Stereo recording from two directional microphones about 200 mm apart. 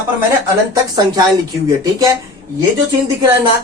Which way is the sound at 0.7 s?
20° right (ahead or behind).